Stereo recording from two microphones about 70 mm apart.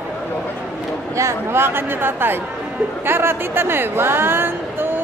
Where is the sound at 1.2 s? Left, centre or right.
Right.